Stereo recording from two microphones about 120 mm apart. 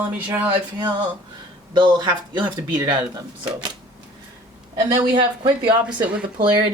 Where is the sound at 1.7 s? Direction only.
40° right (ahead or behind).